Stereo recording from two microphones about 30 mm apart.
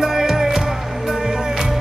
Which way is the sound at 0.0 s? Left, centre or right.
Centre.